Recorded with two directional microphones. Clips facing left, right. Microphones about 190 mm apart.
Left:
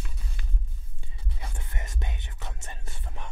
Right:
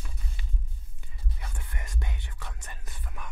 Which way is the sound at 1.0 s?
25° left (ahead or behind).